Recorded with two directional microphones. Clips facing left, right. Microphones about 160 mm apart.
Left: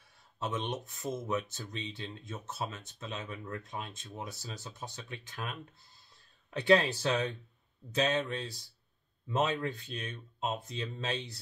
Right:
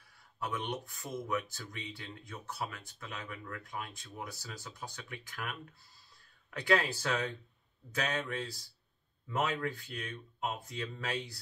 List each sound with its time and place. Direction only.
0.4 s speech: 25° left (ahead or behind)